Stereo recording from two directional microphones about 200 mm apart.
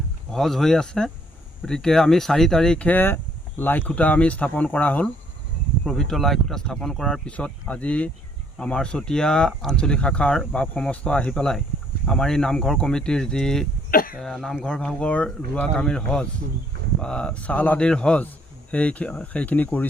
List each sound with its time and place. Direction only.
0.3 s speech: centre (ahead or behind)
13.9 s speech: 45° left (ahead or behind)
14.2 s speech: centre (ahead or behind)